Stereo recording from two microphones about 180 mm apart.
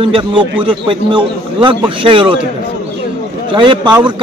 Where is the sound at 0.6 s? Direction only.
25° right (ahead or behind).